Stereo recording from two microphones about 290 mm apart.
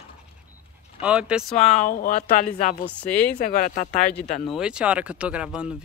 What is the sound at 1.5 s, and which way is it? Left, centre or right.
Speech, left.